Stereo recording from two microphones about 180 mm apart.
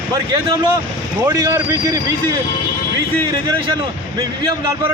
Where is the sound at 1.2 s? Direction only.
20° right (ahead or behind).